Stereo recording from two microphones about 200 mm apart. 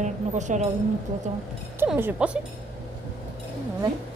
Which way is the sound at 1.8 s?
10° right (ahead or behind).